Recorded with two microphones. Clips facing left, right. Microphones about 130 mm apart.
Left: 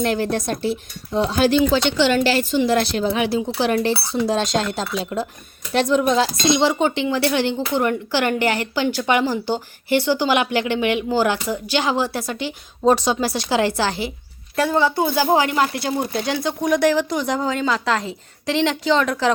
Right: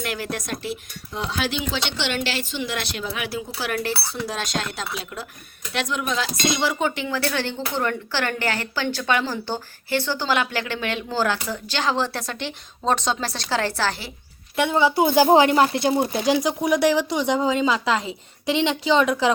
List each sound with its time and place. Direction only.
0.0 s speech: 30° left (ahead or behind)
3.2 s speech: 25° left (ahead or behind)
14.5 s speech: centre (ahead or behind)
14.9 s speech: 15° right (ahead or behind)